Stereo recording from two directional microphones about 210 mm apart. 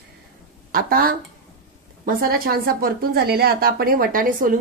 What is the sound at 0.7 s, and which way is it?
Speech, 45° right (ahead or behind).